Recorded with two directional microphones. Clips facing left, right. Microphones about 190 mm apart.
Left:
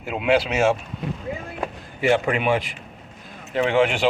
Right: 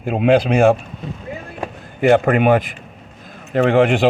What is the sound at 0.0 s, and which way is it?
Speech, 50° right (ahead or behind).